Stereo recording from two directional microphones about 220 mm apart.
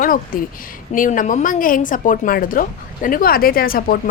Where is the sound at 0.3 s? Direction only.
40° left (ahead or behind).